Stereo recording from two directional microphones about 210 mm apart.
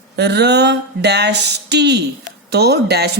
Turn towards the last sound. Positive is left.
turn(degrees=-50)  # may be behind; listen again after turning